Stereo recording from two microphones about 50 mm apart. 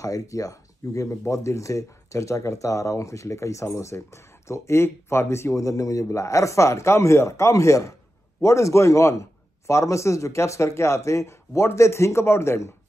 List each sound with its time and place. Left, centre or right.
0.3 s speech: left
3.7 s a man's voice: left